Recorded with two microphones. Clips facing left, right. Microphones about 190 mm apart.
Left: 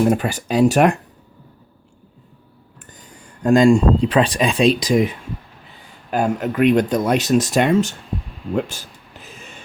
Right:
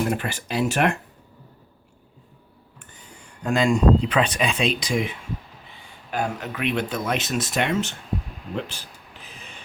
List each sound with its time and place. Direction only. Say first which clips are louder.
0.0 s speech: left 8 dB; 40° left (ahead or behind)
3.4 s speech: left 7 dB; 40° left (ahead or behind)
8.5 s a sound: left 8 dB; 45° left (ahead or behind)